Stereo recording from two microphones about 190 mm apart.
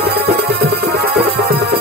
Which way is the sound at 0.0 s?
55° right (ahead or behind).